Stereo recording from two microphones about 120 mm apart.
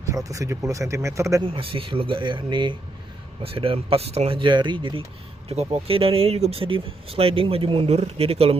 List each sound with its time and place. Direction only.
0.0 s speech: 30° right (ahead or behind)
1.4 s speech: 45° right (ahead or behind)
5.5 s speech: 55° right (ahead or behind)